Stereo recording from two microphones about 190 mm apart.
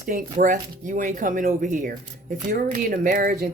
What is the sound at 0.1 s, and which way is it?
Speech, 45° right (ahead or behind).